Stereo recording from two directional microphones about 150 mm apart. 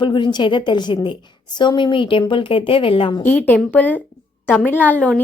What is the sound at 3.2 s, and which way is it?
A woman's voice, 10° left (ahead or behind).